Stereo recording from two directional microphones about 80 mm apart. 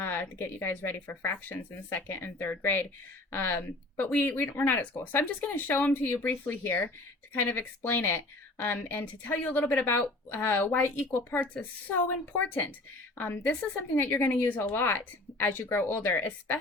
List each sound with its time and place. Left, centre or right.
0.0 s speech: left
13.1 s speech: left